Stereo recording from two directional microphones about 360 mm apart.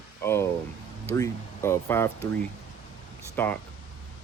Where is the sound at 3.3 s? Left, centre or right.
Centre.